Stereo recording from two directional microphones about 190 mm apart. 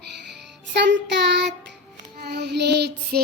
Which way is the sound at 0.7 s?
70° right (ahead or behind).